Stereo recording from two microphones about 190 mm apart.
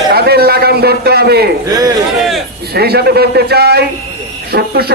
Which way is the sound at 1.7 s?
20° right (ahead or behind).